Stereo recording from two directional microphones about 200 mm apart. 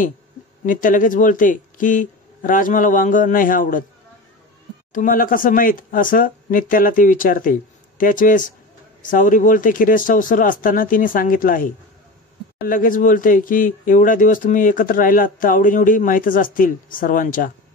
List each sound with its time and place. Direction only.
0.7 s speech: 40° left (ahead or behind)
4.9 s speech: 40° left (ahead or behind)